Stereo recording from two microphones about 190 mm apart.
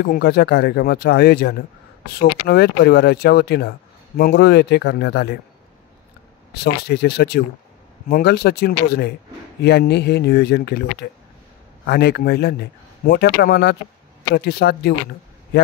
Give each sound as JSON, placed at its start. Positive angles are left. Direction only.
{"t": 0.0, "sound": "speech", "side_deg": 60}
{"t": 6.5, "sound": "speech", "side_deg": 60}